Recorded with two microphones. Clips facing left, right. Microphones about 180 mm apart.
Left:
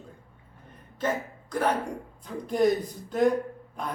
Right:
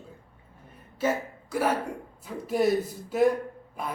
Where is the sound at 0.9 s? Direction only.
5° right (ahead or behind).